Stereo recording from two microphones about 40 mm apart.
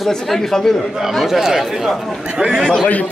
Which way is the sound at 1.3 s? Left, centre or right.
Centre.